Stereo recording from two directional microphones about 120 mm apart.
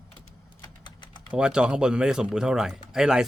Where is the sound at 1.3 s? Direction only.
5° right (ahead or behind).